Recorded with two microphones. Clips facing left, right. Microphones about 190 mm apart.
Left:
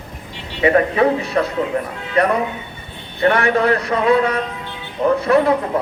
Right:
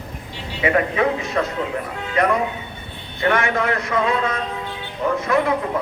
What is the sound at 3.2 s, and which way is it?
A man's voice, 35° left (ahead or behind).